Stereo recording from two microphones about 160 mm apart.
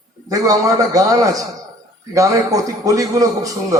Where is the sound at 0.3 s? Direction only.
20° right (ahead or behind).